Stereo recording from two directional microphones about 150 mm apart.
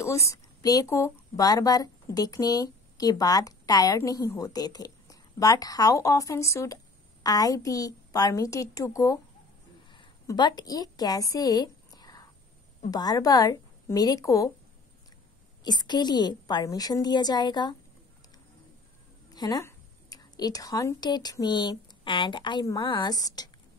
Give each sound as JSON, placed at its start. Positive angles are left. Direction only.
{"t": 0.0, "sound": "speech", "side_deg": 20}
{"t": 9.8, "sound": "a sound", "side_deg": 30}
{"t": 12.9, "sound": "speech", "side_deg": 25}
{"t": 15.6, "sound": "speech", "side_deg": 30}
{"t": 19.3, "sound": "a woman's voice", "side_deg": 25}